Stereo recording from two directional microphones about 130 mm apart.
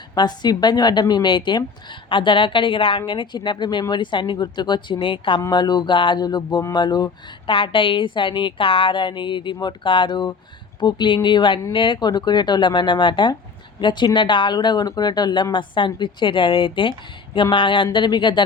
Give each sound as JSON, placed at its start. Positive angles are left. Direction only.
{"t": 0.2, "sound": "a woman's voice", "side_deg": 35}